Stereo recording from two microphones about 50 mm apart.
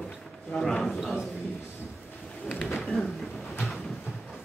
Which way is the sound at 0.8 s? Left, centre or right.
Centre.